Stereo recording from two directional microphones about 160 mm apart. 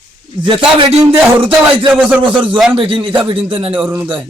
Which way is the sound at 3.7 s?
5° right (ahead or behind).